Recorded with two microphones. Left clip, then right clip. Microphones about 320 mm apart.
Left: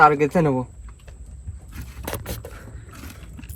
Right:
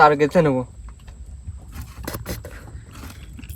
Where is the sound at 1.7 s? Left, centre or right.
Right.